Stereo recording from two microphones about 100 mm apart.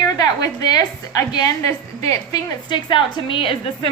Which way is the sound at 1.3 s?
40° left (ahead or behind).